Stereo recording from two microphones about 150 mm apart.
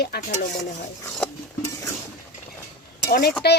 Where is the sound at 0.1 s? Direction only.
90° left.